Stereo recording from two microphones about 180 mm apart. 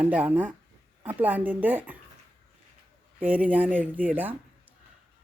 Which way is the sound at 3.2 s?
10° right (ahead or behind).